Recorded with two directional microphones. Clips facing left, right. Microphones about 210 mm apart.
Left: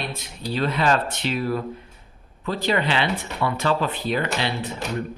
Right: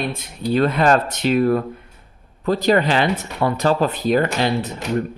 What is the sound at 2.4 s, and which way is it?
Speech, 40° right (ahead or behind).